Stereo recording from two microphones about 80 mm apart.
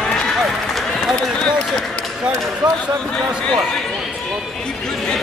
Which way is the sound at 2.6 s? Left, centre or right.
Right.